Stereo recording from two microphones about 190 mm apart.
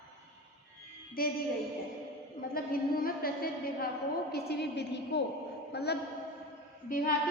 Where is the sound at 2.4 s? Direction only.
50° left (ahead or behind).